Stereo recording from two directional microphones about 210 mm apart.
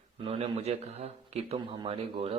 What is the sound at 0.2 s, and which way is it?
A man's voice, 25° right (ahead or behind).